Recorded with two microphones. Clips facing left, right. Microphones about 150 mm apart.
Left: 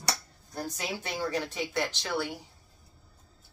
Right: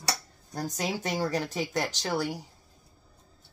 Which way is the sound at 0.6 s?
40° right (ahead or behind).